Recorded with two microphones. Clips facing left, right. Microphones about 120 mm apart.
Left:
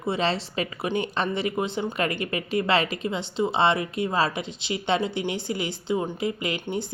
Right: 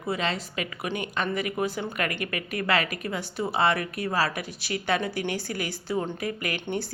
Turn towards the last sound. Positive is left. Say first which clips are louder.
# left 2 dB
turn(degrees=10)  # may be behind; listen again after turning